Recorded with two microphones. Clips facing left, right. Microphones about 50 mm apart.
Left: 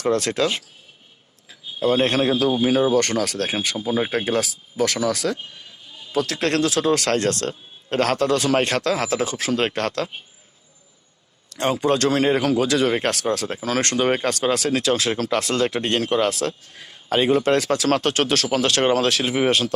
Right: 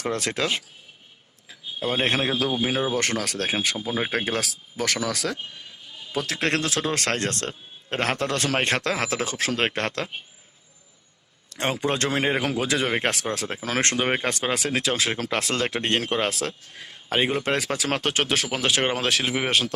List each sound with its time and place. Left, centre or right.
0.0 s a man's voice: centre
2.9 s speech: centre
3.8 s speech: centre
4.1 s speech: centre
6.1 s speech: centre
8.3 s speech: right
11.5 s speech: right; by 19.7 s centre